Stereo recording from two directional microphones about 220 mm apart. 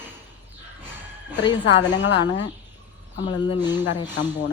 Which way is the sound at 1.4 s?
20° left (ahead or behind).